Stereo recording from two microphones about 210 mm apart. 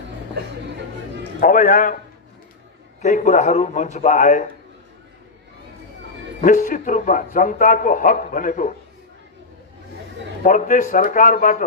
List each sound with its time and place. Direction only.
1.4 s a man's voice: 40° left (ahead or behind)
3.0 s a man's voice: 35° left (ahead or behind)
6.4 s a man's voice: 40° left (ahead or behind)
10.4 s a man's voice: 40° left (ahead or behind)